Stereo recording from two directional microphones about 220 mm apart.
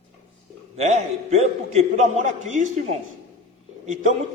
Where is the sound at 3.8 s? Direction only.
35° right (ahead or behind).